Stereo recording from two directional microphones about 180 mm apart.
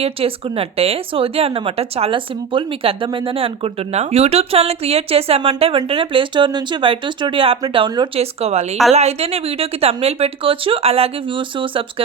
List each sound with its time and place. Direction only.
0.0 s a woman's voice: 30° right (ahead or behind)